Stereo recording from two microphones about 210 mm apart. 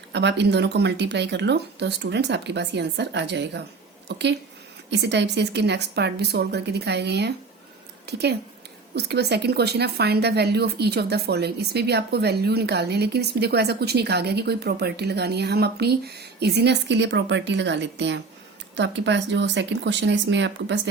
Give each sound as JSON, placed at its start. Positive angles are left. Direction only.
{"t": 0.1, "sound": "a woman's voice", "side_deg": -55}